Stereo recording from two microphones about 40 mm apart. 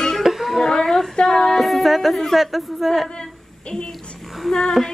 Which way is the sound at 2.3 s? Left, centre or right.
Centre.